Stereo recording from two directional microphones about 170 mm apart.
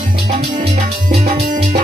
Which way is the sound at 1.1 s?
65° right (ahead or behind).